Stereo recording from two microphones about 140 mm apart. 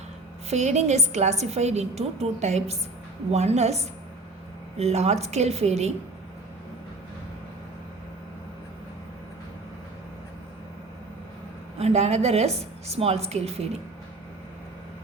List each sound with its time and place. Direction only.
0.5 s a woman's voice: 50° right (ahead or behind)
11.8 s a woman's voice: 50° right (ahead or behind)